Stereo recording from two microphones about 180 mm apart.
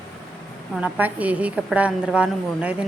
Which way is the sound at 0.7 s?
10° right (ahead or behind).